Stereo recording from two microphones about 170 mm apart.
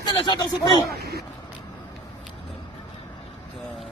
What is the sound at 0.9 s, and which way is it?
Speech, 70° right (ahead or behind).